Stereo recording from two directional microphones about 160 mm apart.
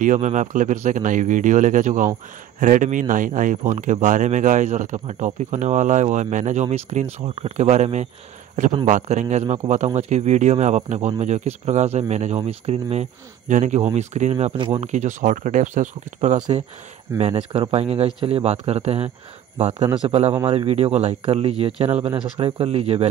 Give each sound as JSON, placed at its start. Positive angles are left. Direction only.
{"t": 0.0, "sound": "speech", "side_deg": -50}
{"t": 17.2, "sound": "speech", "side_deg": -35}